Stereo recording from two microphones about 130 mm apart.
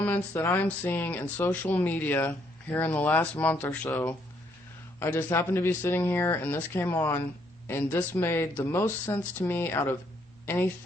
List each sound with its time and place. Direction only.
0.0 s speech: 15° left (ahead or behind)
4.9 s speech: 15° left (ahead or behind)